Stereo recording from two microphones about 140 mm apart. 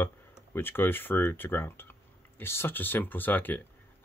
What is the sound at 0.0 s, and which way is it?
Speech, 15° left (ahead or behind).